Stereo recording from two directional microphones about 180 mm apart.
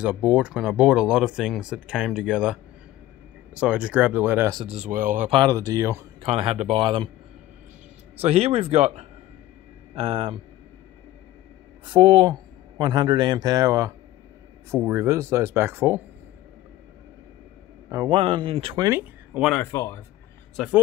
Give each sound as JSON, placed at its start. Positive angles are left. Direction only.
{"t": 0.0, "sound": "speech", "side_deg": -5}
{"t": 4.7, "sound": "speech", "side_deg": -45}
{"t": 5.3, "sound": "speech", "side_deg": -20}
{"t": 6.2, "sound": "speech", "side_deg": -35}
{"t": 8.2, "sound": "speech", "side_deg": -35}
{"t": 11.8, "sound": "speech", "side_deg": -30}
{"t": 17.8, "sound": "a man's voice", "side_deg": -20}
{"t": 18.9, "sound": "speech", "side_deg": -10}
{"t": 19.5, "sound": "speech", "side_deg": 15}
{"t": 20.5, "sound": "speech", "side_deg": -5}